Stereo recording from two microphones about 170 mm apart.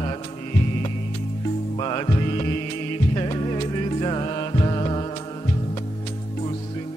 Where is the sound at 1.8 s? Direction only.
30° left (ahead or behind).